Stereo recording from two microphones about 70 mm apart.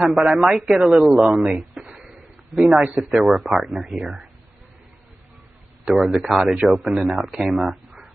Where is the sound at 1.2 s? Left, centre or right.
Centre.